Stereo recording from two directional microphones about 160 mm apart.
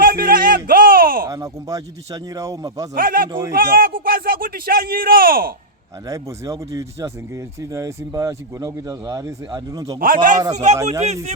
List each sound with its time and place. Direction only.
0.0 s a sound: 65° right (ahead or behind)
1.3 s speech: 20° right (ahead or behind)
2.9 s speech: 65° right (ahead or behind)
6.1 s speech: 20° right (ahead or behind)
10.0 s speech: 65° right (ahead or behind)
10.5 s speech: 45° right (ahead or behind)